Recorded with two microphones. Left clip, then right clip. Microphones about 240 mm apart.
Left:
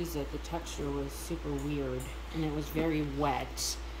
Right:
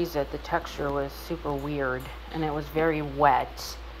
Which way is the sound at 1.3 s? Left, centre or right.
Right.